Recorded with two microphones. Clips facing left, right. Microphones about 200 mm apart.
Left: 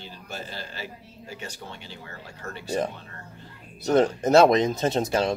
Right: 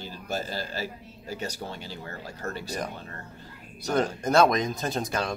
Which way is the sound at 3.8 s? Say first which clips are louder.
Left 5 dB; 25° left (ahead or behind).